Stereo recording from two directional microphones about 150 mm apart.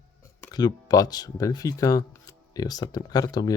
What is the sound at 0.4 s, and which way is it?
Speech, 25° left (ahead or behind).